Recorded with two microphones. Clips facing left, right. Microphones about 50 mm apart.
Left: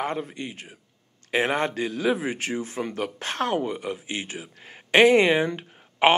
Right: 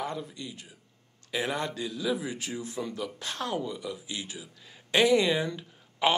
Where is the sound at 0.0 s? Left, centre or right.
Left.